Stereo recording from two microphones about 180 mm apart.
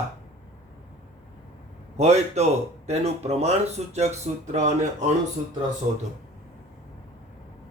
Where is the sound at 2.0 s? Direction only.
40° right (ahead or behind).